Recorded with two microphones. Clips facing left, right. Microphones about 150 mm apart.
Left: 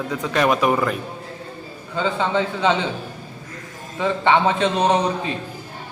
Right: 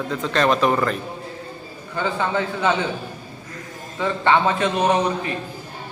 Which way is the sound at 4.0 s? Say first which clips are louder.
Left 1 dB; 15° left (ahead or behind).